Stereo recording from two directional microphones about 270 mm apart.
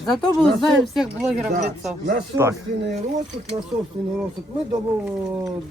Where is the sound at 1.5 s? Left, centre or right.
Right.